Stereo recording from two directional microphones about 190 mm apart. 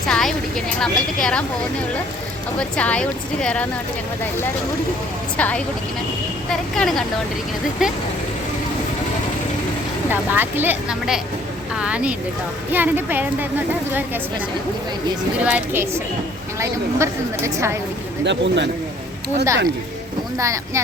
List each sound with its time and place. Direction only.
0.1 s a woman's voice: centre (ahead or behind)
2.6 s speech: 5° left (ahead or behind)
5.4 s a woman's voice: 5° left (ahead or behind)
10.1 s a woman's voice: 10° right (ahead or behind)
15.4 s a woman's voice: 10° right (ahead or behind)
18.3 s a man's voice: 65° right (ahead or behind)
20.4 s a woman's voice: 15° right (ahead or behind)